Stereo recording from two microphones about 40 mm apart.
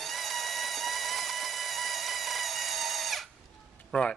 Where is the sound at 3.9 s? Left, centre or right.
Left.